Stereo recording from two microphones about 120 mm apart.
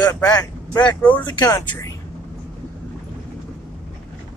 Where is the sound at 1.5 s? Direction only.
15° left (ahead or behind).